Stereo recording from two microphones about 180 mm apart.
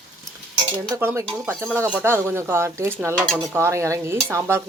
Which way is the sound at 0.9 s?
15° right (ahead or behind).